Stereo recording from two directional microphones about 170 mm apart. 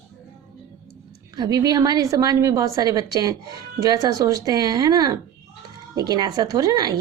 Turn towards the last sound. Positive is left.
turn(degrees=-20)  # may be behind; listen again after turning